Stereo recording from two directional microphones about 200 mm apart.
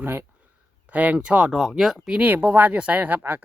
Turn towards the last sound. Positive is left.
turn(degrees=-10)  # may be behind; listen again after turning